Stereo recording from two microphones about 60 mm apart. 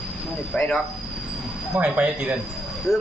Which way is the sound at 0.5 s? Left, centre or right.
Centre.